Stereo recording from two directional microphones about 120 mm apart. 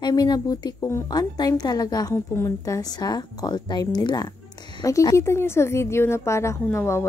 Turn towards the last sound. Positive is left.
turn(degrees=20)  # may be behind; listen again after turning